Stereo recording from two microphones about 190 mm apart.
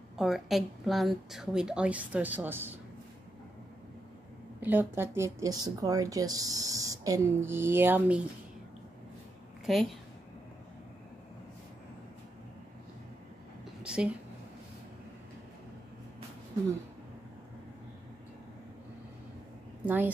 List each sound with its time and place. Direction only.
0.2 s a woman's voice: centre (ahead or behind)
4.6 s speech: 10° right (ahead or behind)
9.7 s a woman's voice: centre (ahead or behind)
13.8 s a sound: 5° right (ahead or behind)